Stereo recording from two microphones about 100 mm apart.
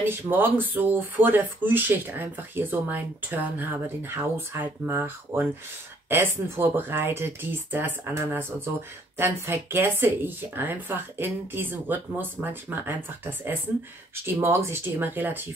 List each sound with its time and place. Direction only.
0.0 s speech: 20° right (ahead or behind)